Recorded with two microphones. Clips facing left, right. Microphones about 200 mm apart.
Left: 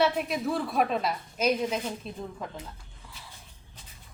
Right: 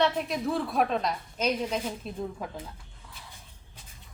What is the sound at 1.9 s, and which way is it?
Speech, 5° right (ahead or behind).